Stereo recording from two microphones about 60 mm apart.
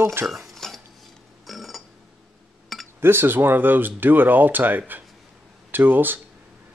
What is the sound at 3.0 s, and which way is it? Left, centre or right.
Speech, right.